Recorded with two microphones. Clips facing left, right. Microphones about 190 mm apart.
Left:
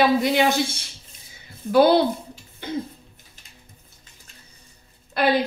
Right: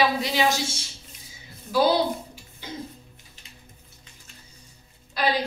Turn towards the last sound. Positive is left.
turn(degrees=55)  # may be behind; listen again after turning